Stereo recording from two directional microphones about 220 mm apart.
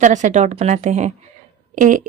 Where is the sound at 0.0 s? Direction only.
35° right (ahead or behind).